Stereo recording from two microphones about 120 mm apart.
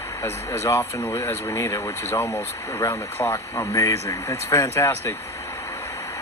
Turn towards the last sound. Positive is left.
turn(degrees=20)  # may be behind; listen again after turning